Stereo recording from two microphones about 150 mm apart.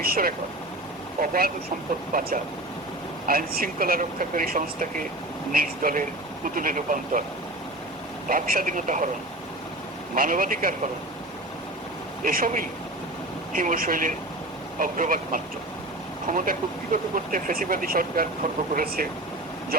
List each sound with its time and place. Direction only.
0.0 s speech: 85° right
1.2 s speech: 70° right (ahead or behind)
2.1 s speech: 85° right; by 7.3 s 60° right (ahead or behind)
8.3 s speech: 70° right (ahead or behind)
10.2 s speech: 70° right (ahead or behind)
12.2 s speech: 70° right (ahead or behind)